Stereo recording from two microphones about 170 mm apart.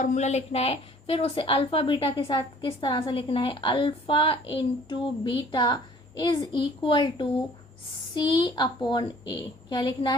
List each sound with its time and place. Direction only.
0.0 s a woman's voice: 45° left (ahead or behind); by 10.2 s 25° left (ahead or behind)